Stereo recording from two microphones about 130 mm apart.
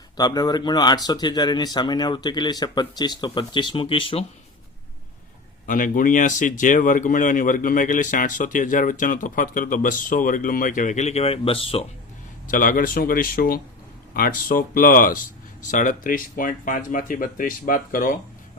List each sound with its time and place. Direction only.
0.2 s speech: 30° left (ahead or behind)
5.6 s speech: 90° left; by 11.9 s 45° left (ahead or behind)
12.5 s speech: 90° left